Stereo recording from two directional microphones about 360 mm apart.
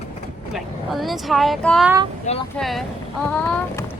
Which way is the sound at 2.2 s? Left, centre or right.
Centre.